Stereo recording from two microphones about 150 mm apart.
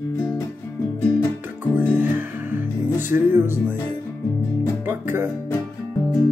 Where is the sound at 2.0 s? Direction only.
15° right (ahead or behind).